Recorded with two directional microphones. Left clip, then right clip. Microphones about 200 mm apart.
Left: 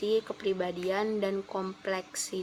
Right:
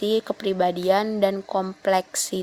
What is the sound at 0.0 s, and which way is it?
A woman's voice, 45° right (ahead or behind).